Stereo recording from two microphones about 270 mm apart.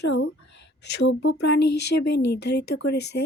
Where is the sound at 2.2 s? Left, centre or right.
Left.